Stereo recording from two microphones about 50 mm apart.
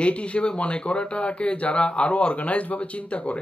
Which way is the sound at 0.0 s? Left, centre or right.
Left.